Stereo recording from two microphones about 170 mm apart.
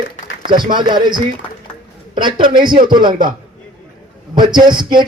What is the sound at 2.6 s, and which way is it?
Speech, 55° right (ahead or behind).